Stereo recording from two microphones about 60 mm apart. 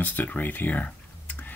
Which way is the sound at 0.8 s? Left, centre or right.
Left.